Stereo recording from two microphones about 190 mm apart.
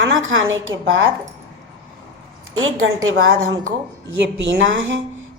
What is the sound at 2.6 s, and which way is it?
Speech, 90° right.